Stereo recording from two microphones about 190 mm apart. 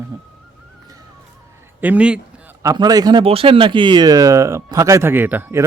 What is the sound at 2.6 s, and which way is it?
Speech, 20° right (ahead or behind).